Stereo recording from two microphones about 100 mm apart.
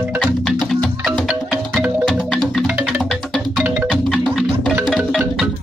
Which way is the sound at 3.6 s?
20° right (ahead or behind).